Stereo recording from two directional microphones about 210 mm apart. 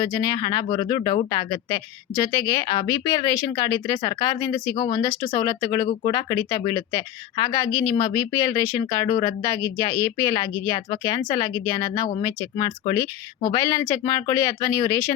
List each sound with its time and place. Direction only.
0.0 s speech: 15° left (ahead or behind)